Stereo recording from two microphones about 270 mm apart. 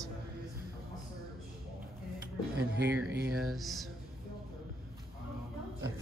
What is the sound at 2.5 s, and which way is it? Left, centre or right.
Speech, right.